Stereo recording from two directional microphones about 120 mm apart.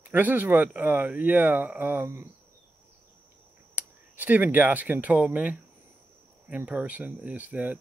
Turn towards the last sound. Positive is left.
turn(degrees=-15)  # may be behind; listen again after turning